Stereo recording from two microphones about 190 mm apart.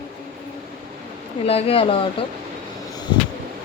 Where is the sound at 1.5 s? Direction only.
30° left (ahead or behind).